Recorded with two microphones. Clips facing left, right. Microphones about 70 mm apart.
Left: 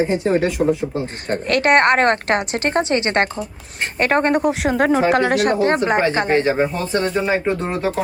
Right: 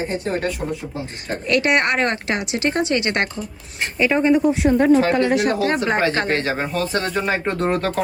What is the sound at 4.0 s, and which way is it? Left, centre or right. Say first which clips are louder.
Speech: even; left.